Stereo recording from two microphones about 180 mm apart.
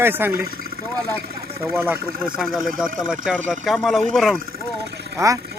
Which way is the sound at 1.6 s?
10° right (ahead or behind).